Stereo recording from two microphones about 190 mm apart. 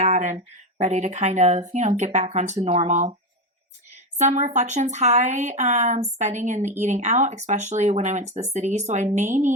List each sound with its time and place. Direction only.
0.0 s a sound: 40° right (ahead or behind)
0.8 s speech: 35° right (ahead or behind)
4.2 s speech: 40° right (ahead or behind)